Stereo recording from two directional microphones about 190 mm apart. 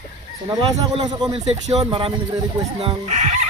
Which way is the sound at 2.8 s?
35° right (ahead or behind).